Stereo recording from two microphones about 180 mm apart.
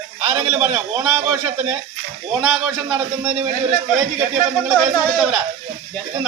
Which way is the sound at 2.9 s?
25° right (ahead or behind).